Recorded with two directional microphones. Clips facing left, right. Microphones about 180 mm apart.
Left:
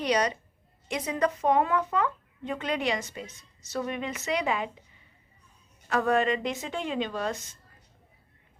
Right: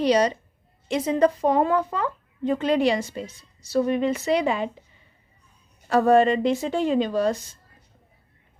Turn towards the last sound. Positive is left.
turn(degrees=-35)  # may be behind; listen again after turning